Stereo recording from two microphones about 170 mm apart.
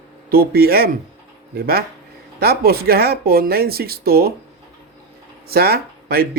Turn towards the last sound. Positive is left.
turn(degrees=-65)  # may be behind; listen again after turning